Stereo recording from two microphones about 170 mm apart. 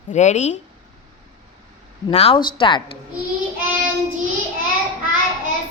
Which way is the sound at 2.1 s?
40° left (ahead or behind).